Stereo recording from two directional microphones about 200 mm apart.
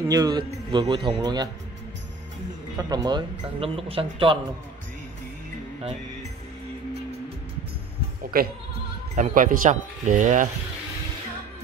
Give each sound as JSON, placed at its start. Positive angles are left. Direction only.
{"t": 0.0, "sound": "speech", "side_deg": -20}
{"t": 2.8, "sound": "speech", "side_deg": -20}
{"t": 8.2, "sound": "speech", "side_deg": -45}